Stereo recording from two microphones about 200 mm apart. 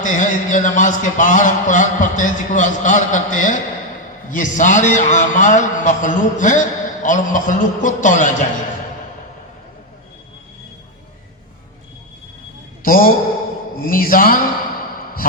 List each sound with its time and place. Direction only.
0.0 s a man's voice: 40° left (ahead or behind)
12.8 s a man's voice: 45° left (ahead or behind)
13.8 s a sound: 45° left (ahead or behind)